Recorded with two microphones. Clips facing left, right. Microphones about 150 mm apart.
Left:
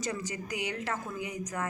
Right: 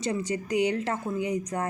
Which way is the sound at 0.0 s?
30° right (ahead or behind).